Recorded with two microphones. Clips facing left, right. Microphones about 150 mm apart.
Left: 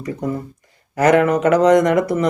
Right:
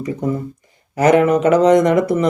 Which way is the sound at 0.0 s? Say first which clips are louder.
Right 3 dB; 20° right (ahead or behind).